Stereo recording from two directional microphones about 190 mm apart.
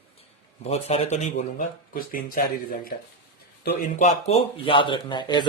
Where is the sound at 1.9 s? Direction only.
50° left (ahead or behind).